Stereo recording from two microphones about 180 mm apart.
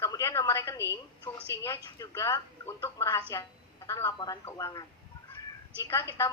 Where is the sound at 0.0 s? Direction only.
15° left (ahead or behind).